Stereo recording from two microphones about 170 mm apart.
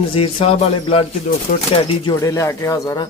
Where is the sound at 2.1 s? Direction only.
20° left (ahead or behind).